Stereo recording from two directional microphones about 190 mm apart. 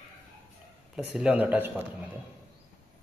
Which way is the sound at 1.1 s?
5° right (ahead or behind).